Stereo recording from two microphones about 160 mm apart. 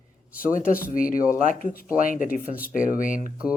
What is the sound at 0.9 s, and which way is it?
Speech, 60° left (ahead or behind).